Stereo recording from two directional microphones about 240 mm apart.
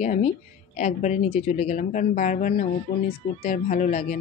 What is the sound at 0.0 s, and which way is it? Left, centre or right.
Speech, left.